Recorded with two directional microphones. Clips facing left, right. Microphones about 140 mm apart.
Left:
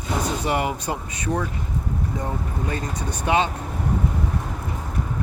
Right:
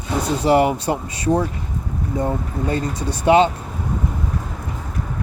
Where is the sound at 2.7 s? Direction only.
35° right (ahead or behind).